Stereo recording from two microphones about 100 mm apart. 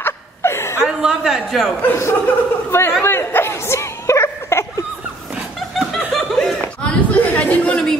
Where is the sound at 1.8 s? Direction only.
25° left (ahead or behind).